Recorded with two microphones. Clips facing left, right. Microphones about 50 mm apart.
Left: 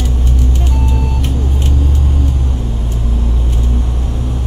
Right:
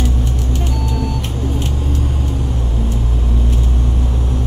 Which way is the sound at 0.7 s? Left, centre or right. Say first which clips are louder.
Left 1 dB; left.